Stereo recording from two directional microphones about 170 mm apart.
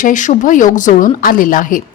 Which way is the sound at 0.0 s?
50° left (ahead or behind).